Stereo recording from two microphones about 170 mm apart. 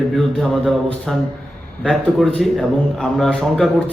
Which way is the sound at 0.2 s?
Centre (ahead or behind).